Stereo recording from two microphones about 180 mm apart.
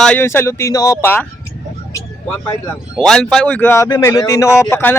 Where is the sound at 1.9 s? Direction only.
15° left (ahead or behind).